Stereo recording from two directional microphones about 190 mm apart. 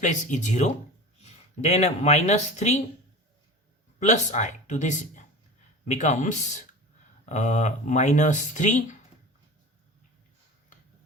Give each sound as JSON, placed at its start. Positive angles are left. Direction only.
{"t": 0.0, "sound": "speech", "side_deg": 40}
{"t": 4.0, "sound": "speech", "side_deg": 40}
{"t": 7.3, "sound": "speech", "side_deg": 40}